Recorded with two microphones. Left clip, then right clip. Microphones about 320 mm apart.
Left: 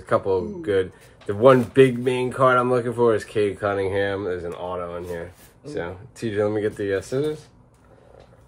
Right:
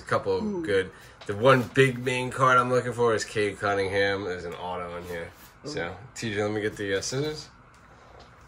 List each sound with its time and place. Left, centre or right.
0.0 s speech: centre